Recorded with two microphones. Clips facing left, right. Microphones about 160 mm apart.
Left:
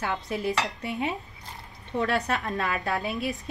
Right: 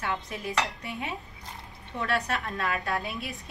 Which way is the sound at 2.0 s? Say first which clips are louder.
Left 3 dB; 40° left (ahead or behind).